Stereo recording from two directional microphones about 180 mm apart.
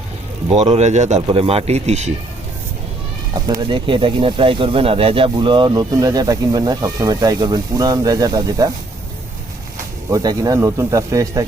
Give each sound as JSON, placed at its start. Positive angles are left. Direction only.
{"t": 0.5, "sound": "speech", "side_deg": -40}
{"t": 3.3, "sound": "speech", "side_deg": -20}
{"t": 10.1, "sound": "speech", "side_deg": -20}